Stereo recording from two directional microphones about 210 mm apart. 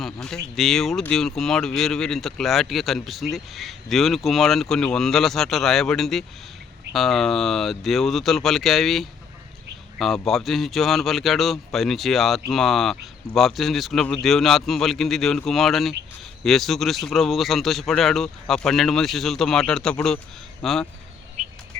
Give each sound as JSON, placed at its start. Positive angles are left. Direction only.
{"t": 0.0, "sound": "speech", "side_deg": 0}
{"t": 21.4, "sound": "bird", "side_deg": -35}